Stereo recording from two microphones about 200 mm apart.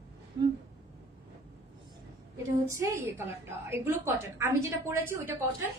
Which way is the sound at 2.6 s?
15° right (ahead or behind).